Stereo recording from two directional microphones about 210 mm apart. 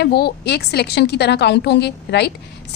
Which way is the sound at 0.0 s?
50° left (ahead or behind).